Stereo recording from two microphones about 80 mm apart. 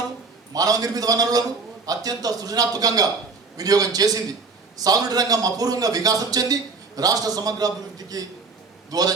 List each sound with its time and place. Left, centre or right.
0.5 s a man's voice: right